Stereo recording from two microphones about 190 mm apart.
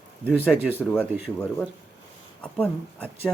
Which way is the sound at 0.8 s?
10° left (ahead or behind).